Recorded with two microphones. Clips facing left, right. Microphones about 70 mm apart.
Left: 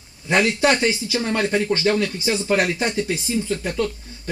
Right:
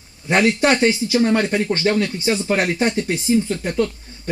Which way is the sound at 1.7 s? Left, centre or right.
Right.